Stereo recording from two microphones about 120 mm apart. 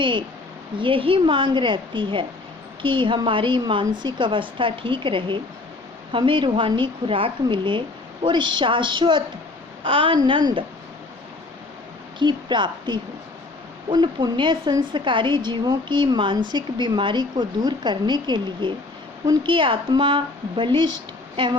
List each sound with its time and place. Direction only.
0.0 s a woman's voice: 45° right (ahead or behind)
12.2 s a woman's voice: 40° right (ahead or behind)